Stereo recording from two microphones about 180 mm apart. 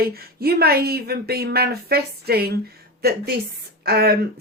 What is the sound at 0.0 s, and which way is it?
Speech, 60° right (ahead or behind).